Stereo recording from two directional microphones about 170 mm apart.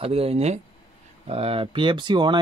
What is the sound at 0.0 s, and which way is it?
Speech, 35° right (ahead or behind).